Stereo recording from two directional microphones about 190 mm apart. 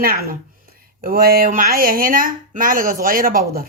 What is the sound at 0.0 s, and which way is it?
A man's voice, 50° right (ahead or behind).